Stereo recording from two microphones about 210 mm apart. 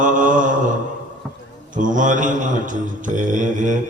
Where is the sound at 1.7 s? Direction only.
40° right (ahead or behind).